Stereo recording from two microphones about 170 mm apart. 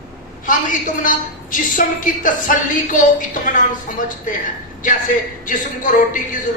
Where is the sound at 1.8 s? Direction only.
50° left (ahead or behind).